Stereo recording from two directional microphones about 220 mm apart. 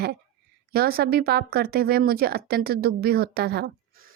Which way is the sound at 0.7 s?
45° right (ahead or behind).